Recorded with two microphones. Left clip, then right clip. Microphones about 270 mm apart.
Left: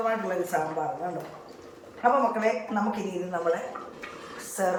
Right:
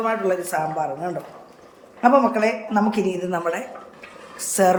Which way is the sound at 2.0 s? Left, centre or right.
Right.